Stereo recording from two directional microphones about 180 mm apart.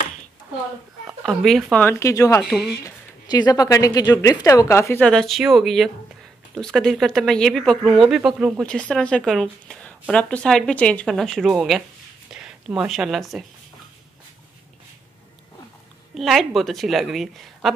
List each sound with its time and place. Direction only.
1.2 s a woman's voice: centre (ahead or behind)
16.2 s speech: centre (ahead or behind)